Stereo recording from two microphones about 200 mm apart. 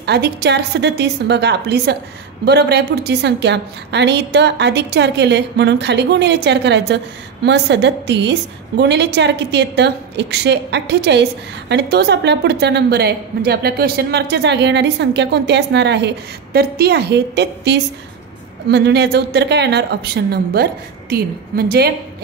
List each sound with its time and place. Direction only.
0.0 s a woman's voice: 55° right (ahead or behind)